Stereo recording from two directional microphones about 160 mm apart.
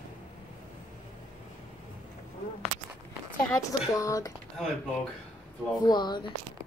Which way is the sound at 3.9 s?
20° left (ahead or behind).